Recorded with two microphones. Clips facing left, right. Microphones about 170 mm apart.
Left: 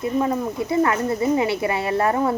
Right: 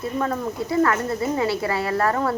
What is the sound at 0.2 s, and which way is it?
Speech, 20° left (ahead or behind).